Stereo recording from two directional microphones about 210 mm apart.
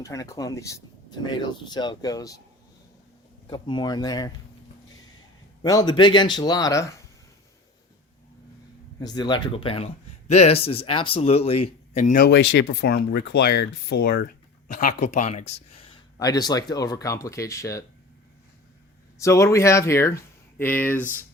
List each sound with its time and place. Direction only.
0.0 s speech: 15° left (ahead or behind)
3.5 s speech: 20° left (ahead or behind)
5.6 s speech: 20° left (ahead or behind)
9.0 s speech: 20° left (ahead or behind)
19.2 s speech: 15° left (ahead or behind)